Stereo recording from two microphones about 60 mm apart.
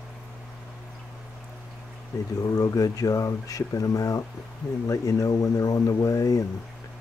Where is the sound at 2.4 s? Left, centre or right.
Left.